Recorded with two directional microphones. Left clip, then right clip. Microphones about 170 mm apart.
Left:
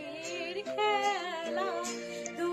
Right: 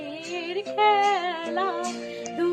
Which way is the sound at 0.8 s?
15° right (ahead or behind).